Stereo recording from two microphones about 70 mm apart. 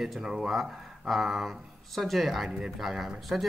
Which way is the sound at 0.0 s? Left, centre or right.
Centre.